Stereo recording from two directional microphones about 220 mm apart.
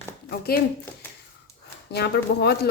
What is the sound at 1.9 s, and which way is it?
Speech, 45° left (ahead or behind).